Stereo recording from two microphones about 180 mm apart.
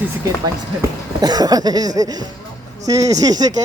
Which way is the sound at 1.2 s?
20° right (ahead or behind).